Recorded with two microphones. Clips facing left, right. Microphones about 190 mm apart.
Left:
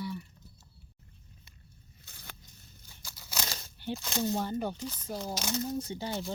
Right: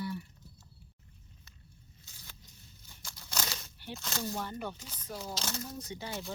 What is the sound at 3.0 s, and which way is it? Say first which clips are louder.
Crumpling: even; 5° left (ahead or behind).